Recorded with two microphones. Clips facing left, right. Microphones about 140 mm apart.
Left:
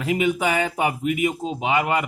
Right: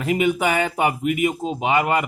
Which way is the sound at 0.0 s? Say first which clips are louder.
Right 2 dB; 50° right (ahead or behind).